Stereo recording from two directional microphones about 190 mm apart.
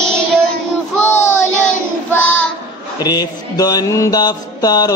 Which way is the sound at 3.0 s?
20° left (ahead or behind).